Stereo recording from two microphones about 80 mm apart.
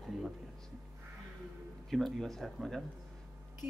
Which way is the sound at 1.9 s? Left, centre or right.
Centre.